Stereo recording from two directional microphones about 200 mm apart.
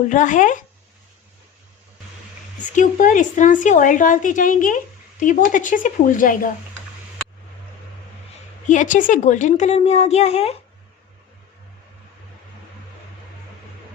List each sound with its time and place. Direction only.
0.1 s a woman's voice: 40° left (ahead or behind)
2.7 s a woman's voice: 40° left (ahead or behind)
8.6 s a woman's voice: 40° left (ahead or behind)